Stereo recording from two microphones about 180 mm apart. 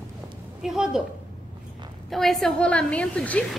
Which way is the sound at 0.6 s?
5° right (ahead or behind).